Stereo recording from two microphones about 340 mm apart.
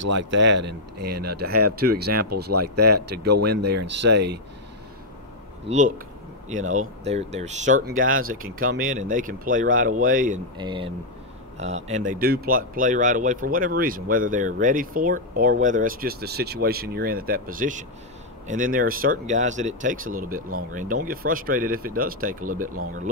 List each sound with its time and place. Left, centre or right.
0.0 s speech: right
5.7 s speech: centre
10.6 s speech: centre